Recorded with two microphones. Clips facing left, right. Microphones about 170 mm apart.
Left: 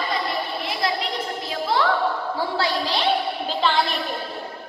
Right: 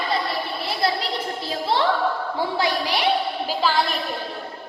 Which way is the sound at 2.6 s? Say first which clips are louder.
Right 1 dB; 15° right (ahead or behind).